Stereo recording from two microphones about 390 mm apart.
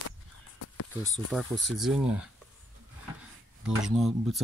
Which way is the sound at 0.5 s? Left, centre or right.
Left.